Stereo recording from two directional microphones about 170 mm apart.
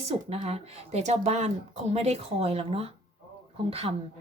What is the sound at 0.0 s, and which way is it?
A woman's voice, 35° right (ahead or behind).